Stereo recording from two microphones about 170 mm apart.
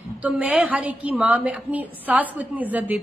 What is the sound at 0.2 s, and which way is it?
A woman's voice, 10° right (ahead or behind).